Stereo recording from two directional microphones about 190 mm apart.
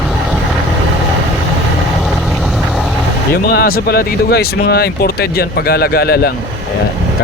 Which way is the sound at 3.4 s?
55° left (ahead or behind).